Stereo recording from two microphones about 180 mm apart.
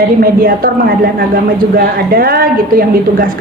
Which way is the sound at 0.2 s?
55° right (ahead or behind).